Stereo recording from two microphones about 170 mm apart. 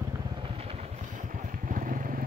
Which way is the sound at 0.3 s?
35° right (ahead or behind).